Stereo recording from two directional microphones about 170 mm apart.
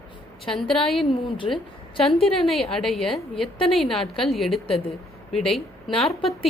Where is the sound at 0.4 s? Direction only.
Centre (ahead or behind).